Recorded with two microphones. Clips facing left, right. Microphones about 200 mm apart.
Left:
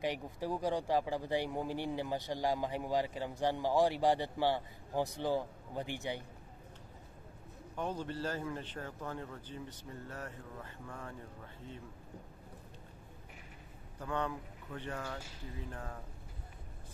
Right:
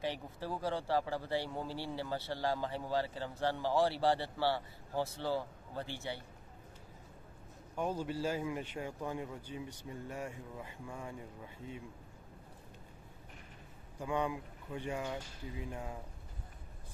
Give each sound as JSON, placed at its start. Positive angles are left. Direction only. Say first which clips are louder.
{"t": 0.0, "sound": "speech", "louder": "left 2 dB", "side_deg": 15}
{"t": 7.7, "sound": "a man's voice", "louder": "right 2 dB", "side_deg": -10}
{"t": 13.9, "sound": "a man's voice", "louder": "right 2 dB", "side_deg": -10}